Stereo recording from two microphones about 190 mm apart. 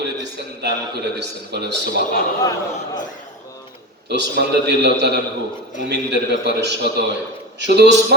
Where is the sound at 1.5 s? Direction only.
60° right (ahead or behind).